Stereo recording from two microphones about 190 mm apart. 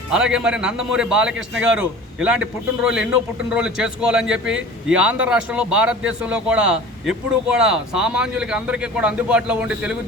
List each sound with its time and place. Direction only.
0.1 s a man's voice: 5° right (ahead or behind)